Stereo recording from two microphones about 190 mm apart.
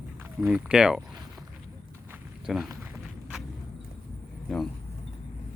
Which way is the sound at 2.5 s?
Centre (ahead or behind).